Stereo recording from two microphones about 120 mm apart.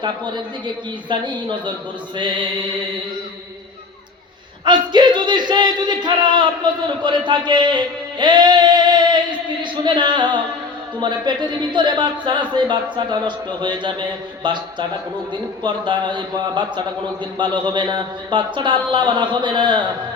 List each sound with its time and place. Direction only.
1.1 s speech: 40° right (ahead or behind)
4.6 s speech: 40° right (ahead or behind)
8.2 s a sound: 40° right (ahead or behind)
9.8 s speech: 40° right (ahead or behind)